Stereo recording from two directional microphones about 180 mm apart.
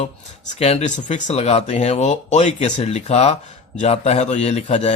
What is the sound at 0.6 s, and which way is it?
A man's voice, 35° left (ahead or behind).